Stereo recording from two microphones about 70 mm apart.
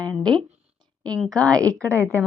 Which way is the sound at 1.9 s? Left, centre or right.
Right.